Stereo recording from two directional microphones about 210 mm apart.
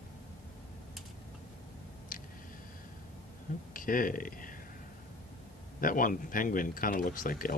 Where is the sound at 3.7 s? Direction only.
40° left (ahead or behind).